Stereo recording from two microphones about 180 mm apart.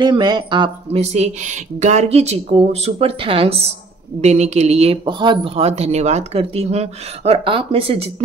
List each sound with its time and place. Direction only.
0.0 s speech: 25° right (ahead or behind)